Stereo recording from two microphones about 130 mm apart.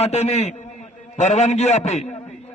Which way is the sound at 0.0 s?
55° left (ahead or behind).